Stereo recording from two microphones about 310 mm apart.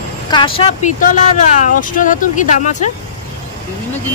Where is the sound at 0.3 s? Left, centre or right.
Centre.